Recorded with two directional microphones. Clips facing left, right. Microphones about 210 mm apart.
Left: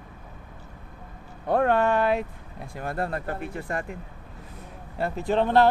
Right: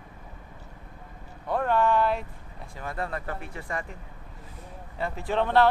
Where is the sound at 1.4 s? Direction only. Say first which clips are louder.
Left 3 dB; 60° left (ahead or behind).